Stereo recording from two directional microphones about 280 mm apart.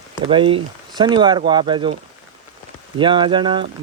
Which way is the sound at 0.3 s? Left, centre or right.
Centre.